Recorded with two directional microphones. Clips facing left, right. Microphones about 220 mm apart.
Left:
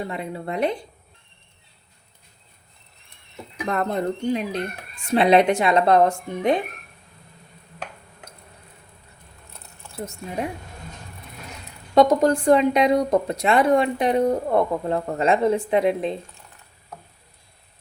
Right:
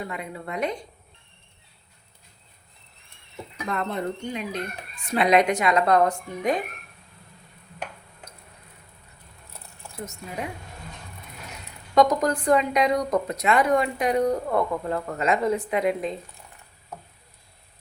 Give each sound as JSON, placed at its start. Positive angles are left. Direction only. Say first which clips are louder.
{"t": 0.0, "sound": "a woman's voice", "louder": "left 4 dB", "side_deg": 30}
{"t": 3.7, "sound": "a woman's voice", "louder": "left 4 dB", "side_deg": 45}
{"t": 11.9, "sound": "a woman's voice", "louder": "left 4 dB", "side_deg": 30}